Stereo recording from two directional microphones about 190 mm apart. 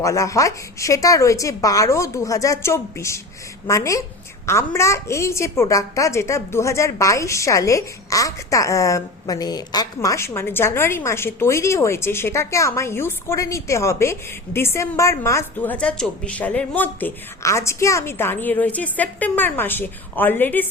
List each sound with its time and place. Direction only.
0.0 s a woman's voice: 15° left (ahead or behind)